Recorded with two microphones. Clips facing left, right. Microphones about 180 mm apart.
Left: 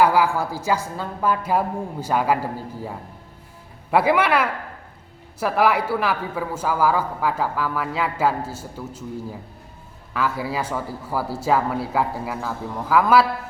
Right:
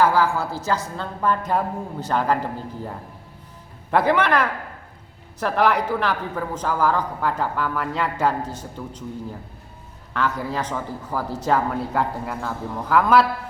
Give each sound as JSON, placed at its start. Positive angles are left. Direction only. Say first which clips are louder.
{"t": 0.0, "sound": "a woman's voice", "louder": "left 1 dB", "side_deg": 15}
{"t": 10.2, "sound": "a man's voice", "louder": "even", "side_deg": 5}